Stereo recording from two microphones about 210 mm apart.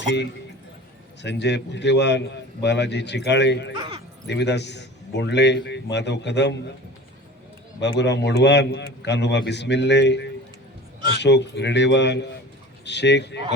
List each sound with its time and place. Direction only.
1.2 s a man's voice: 55° left (ahead or behind)
3.8 s a sound: 25° right (ahead or behind)
4.3 s a man's voice: 55° left (ahead or behind)
7.8 s a man's voice: 55° left (ahead or behind)